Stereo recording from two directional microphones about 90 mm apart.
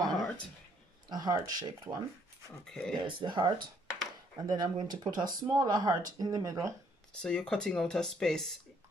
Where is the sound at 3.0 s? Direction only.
65° right (ahead or behind).